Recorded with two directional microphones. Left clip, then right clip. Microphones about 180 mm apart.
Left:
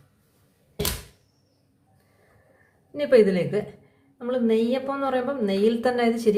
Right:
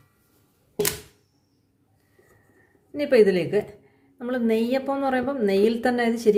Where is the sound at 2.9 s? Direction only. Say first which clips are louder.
Even; 15° right (ahead or behind).